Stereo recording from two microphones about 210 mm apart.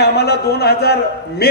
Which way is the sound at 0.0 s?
50° left (ahead or behind).